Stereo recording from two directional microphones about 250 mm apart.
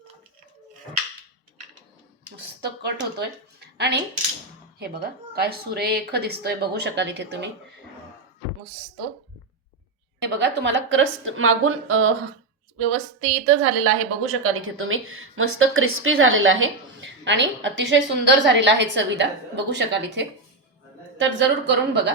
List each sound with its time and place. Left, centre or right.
2.6 s a woman's voice: right
5.0 s speech: right
10.2 s a woman's voice: right